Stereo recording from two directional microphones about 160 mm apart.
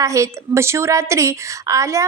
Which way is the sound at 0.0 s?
20° right (ahead or behind).